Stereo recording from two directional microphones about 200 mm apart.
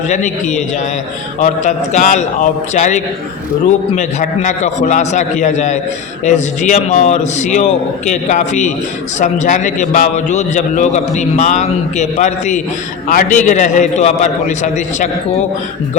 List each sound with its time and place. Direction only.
0.1 s a man's voice: 35° left (ahead or behind)